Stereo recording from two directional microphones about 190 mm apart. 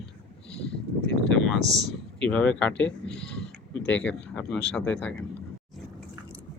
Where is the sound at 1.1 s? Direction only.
5° left (ahead or behind).